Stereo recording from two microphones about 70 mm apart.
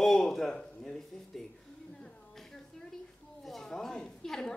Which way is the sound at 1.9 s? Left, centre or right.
Centre.